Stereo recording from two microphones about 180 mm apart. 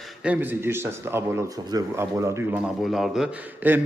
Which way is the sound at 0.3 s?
10° right (ahead or behind).